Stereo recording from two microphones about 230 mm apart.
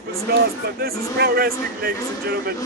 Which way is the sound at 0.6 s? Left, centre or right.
Right.